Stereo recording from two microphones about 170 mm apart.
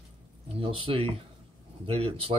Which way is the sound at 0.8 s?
30° right (ahead or behind).